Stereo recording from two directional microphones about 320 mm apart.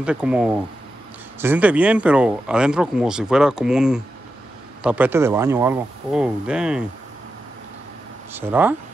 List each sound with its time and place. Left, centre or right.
0.0 s speech: centre
8.3 s speech: centre